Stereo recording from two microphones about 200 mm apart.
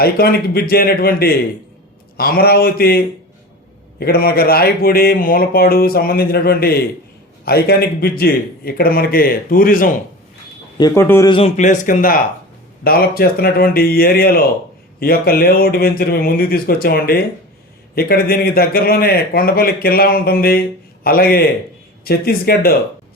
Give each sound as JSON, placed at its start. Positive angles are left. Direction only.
{"t": 0.0, "sound": "speech", "side_deg": 50}
{"t": 4.0, "sound": "speech", "side_deg": 50}
{"t": 10.8, "sound": "speech", "side_deg": 15}
{"t": 11.3, "sound": "speech", "side_deg": 30}